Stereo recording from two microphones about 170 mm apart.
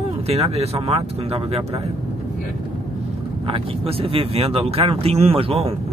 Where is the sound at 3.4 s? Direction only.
30° right (ahead or behind).